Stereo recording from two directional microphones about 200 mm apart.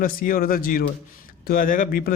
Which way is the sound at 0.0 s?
45° left (ahead or behind).